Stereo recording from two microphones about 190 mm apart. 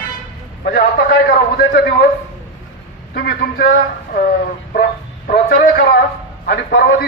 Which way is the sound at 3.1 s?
50° left (ahead or behind).